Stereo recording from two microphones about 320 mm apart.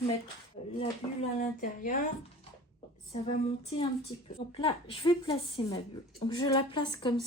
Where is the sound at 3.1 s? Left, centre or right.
Centre.